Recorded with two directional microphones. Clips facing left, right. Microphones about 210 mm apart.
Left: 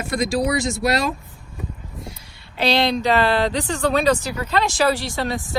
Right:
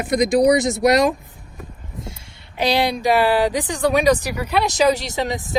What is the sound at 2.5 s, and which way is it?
Speech, 15° right (ahead or behind).